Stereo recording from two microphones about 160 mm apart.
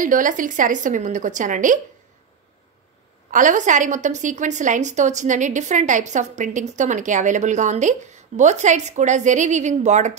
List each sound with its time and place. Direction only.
0.0 s a woman's voice: 55° right (ahead or behind)
3.3 s a woman's voice: 55° right (ahead or behind)